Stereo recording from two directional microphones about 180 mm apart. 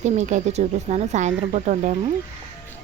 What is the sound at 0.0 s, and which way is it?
Speech, 40° right (ahead or behind).